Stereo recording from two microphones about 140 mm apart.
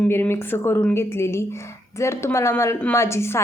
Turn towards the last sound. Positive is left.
turn(degrees=20)  # may be behind; listen again after turning